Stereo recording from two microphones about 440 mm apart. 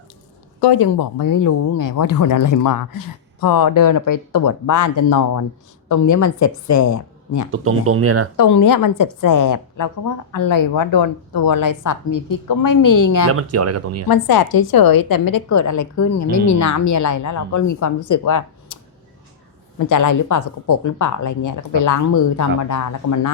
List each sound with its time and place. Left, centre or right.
0.6 s a woman's voice: left
7.5 s speech: right
8.4 s a woman's voice: left
13.3 s speech: right
14.1 s a woman's voice: left
19.8 s a woman's voice: left